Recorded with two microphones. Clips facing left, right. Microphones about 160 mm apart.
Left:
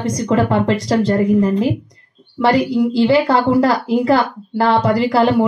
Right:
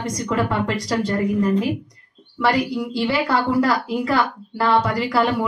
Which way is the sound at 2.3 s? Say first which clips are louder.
Left 6 dB; 25° left (ahead or behind).